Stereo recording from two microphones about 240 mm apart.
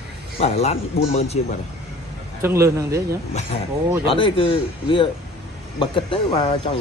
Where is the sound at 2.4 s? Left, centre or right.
Centre.